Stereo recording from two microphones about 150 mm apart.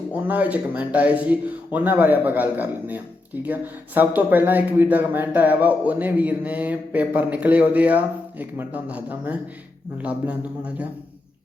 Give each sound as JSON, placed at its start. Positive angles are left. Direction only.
{"t": 0.1, "sound": "speech", "side_deg": -10}